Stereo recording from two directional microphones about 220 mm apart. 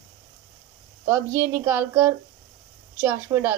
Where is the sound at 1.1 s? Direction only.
10° right (ahead or behind).